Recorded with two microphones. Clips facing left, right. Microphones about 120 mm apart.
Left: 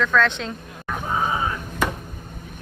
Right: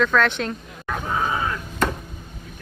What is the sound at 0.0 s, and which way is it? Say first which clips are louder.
Speech: right 1 dB; 15° right (ahead or behind).